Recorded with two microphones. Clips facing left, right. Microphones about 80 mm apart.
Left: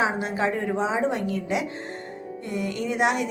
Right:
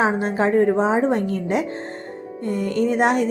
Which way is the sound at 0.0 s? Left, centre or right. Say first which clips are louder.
Right 5 dB; right.